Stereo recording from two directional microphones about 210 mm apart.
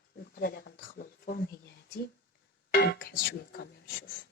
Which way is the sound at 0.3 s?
50° left (ahead or behind).